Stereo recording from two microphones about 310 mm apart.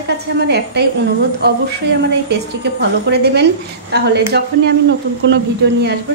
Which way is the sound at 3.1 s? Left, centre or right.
Right.